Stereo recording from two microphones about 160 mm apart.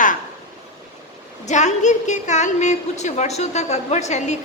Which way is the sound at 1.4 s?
45° left (ahead or behind).